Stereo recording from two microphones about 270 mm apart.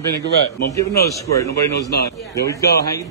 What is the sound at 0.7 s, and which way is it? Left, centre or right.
Speech, centre.